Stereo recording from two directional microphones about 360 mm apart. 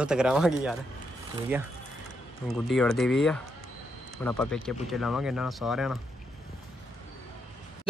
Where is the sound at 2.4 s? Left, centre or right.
Centre.